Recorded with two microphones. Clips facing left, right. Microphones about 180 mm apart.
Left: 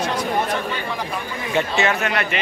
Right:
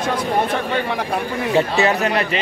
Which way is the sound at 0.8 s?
65° right (ahead or behind).